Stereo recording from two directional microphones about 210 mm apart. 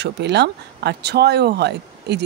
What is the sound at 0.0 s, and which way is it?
A woman's voice, 55° right (ahead or behind).